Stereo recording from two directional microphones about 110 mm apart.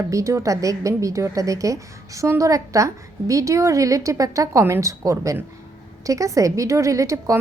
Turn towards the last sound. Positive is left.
turn(degrees=-30)  # may be behind; listen again after turning